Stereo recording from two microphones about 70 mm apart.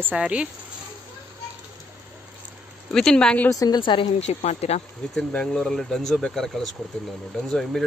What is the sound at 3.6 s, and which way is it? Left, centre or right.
Speech, left.